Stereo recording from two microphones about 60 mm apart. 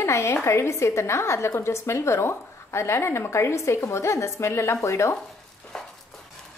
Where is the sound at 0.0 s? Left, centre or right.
Left.